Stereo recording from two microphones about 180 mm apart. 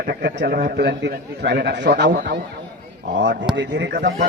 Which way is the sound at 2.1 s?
60° right (ahead or behind).